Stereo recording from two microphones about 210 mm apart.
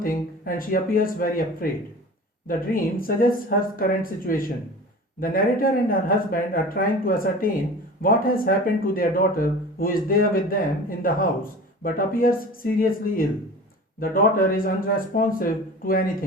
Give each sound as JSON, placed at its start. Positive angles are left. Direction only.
{"t": 0.0, "sound": "speech", "side_deg": 40}